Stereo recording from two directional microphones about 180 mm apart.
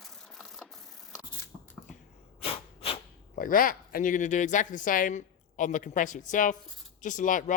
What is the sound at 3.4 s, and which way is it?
A man's voice, 50° left (ahead or behind).